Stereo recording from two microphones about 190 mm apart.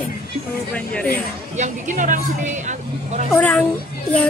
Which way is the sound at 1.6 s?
45° right (ahead or behind).